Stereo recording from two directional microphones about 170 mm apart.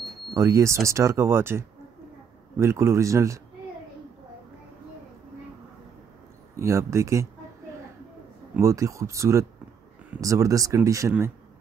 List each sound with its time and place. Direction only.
0.3 s speech: 15° right (ahead or behind)
6.5 s speech: 15° right (ahead or behind)
8.5 s speech: 20° right (ahead or behind)